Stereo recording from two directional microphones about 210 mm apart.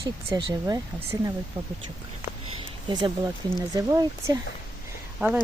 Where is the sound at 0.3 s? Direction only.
20° right (ahead or behind).